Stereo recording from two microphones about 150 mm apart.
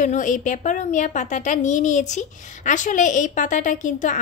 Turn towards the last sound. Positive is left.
turn(degrees=55)  # may be behind; listen again after turning